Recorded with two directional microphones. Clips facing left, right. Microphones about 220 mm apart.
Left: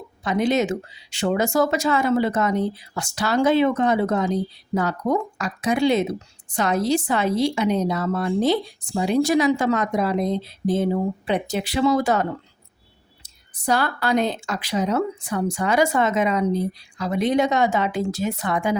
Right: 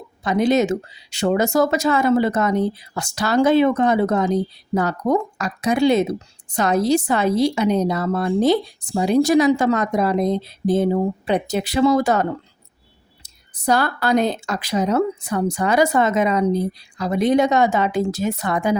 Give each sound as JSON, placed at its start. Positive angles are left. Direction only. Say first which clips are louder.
{"t": 0.3, "sound": "a woman's voice", "louder": "right 3 dB", "side_deg": -40}
{"t": 13.6, "sound": "a woman's voice", "louder": "right 3 dB", "side_deg": -40}